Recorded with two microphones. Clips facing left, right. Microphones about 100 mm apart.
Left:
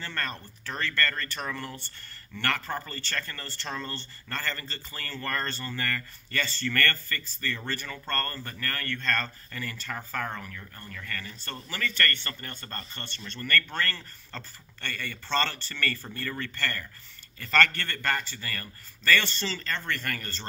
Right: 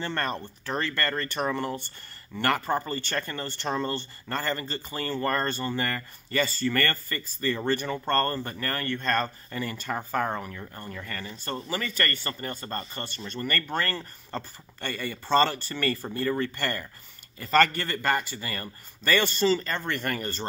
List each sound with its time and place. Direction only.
0.0 s a man's voice: 20° right (ahead or behind)